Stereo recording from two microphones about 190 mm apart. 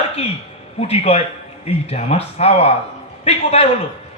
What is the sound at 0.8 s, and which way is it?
A man's voice, 30° left (ahead or behind).